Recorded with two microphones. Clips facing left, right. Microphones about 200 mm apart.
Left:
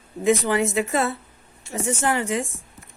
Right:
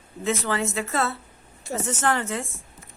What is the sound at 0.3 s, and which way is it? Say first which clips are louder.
A woman's voice: left 6 dB; 15° left (ahead or behind).